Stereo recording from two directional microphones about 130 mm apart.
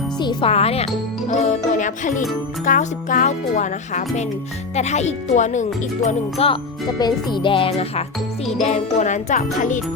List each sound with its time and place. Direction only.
0.2 s speech: 35° left (ahead or behind)
0.5 s speech: 50° left (ahead or behind)
1.3 s music: 75° left (ahead or behind)
2.6 s speech: 90° left; by 4.3 s 70° left (ahead or behind)
4.7 s speech: 60° left (ahead or behind)
6.1 s speech: 50° left (ahead or behind)
6.8 s music: 30° left (ahead or behind)
8.6 s music: 60° left (ahead or behind)